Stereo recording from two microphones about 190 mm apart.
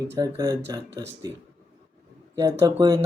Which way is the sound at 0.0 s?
20° right (ahead or behind).